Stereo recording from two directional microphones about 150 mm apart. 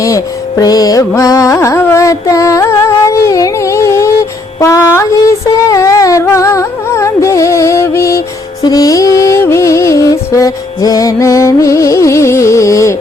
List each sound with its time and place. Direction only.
0.0 s music: 25° left (ahead or behind)
4.6 s a sound: 20° left (ahead or behind)
8.6 s music: 25° left (ahead or behind)